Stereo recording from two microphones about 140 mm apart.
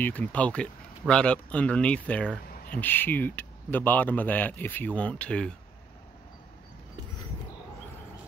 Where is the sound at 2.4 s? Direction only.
90° left.